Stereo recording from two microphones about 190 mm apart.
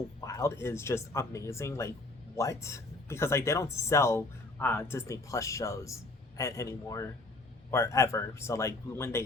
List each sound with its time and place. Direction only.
0.2 s speech: 15° left (ahead or behind)